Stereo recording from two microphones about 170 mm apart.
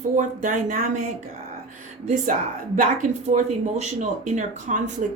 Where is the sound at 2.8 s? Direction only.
45° right (ahead or behind).